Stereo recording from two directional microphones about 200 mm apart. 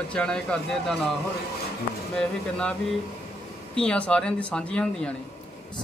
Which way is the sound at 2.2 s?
5° left (ahead or behind).